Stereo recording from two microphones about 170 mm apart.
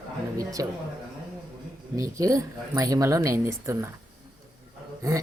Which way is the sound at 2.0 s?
20° right (ahead or behind).